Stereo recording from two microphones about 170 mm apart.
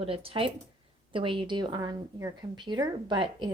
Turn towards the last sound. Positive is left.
turn(degrees=-25)  # may be behind; listen again after turning